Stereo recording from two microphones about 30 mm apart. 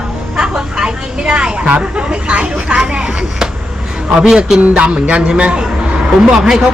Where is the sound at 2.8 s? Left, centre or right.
Right.